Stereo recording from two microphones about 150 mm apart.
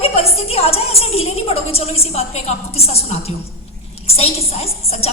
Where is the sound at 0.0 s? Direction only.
40° left (ahead or behind).